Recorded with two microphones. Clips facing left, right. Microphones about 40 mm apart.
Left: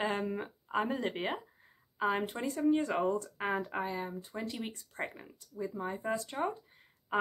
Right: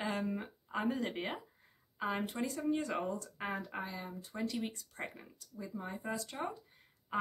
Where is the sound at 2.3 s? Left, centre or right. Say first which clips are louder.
Left 5 dB; left.